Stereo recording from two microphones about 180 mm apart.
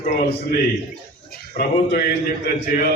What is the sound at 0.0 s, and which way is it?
Speech, 55° left (ahead or behind).